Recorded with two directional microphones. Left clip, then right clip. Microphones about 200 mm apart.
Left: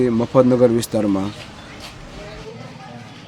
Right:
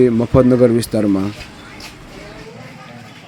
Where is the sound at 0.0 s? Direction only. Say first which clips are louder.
Right 3 dB; 10° right (ahead or behind).